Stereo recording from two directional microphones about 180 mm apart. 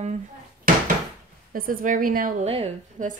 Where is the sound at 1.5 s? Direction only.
50° right (ahead or behind).